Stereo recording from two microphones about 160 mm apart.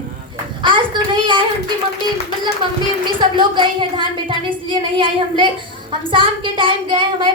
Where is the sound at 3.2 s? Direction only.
30° right (ahead or behind).